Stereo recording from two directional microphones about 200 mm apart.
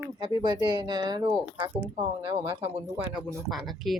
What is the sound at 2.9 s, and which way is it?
Speech, 10° right (ahead or behind).